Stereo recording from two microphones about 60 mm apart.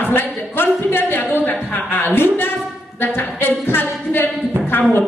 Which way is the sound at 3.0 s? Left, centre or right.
Left.